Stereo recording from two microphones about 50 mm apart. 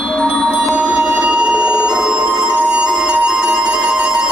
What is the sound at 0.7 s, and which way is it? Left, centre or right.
Music, right.